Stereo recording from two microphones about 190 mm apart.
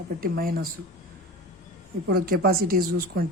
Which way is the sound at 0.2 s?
50° right (ahead or behind).